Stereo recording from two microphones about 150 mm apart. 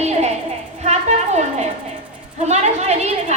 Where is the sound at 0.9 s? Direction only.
45° right (ahead or behind).